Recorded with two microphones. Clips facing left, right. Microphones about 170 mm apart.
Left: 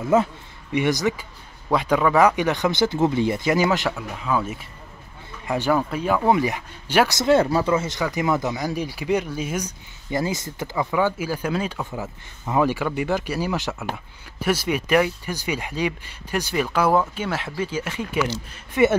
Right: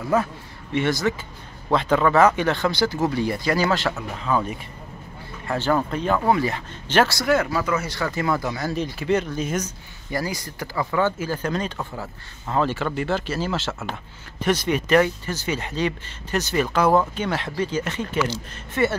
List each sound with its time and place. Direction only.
0.1 s a man's voice: 20° left (ahead or behind)
4.2 s speech: 5° left (ahead or behind)
6.2 s speech: 15° left (ahead or behind)
7.2 s speech: 25° left (ahead or behind); by 9.7 s 10° left (ahead or behind)
10.1 s speech: 20° left (ahead or behind)